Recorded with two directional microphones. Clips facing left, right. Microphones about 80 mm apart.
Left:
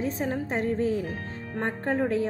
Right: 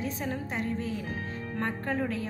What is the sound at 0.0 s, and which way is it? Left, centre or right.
A woman's voice, left.